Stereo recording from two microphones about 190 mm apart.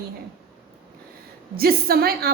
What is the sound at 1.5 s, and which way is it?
Speech, 55° right (ahead or behind).